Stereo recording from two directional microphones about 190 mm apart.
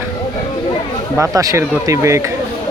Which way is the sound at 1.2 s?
15° right (ahead or behind).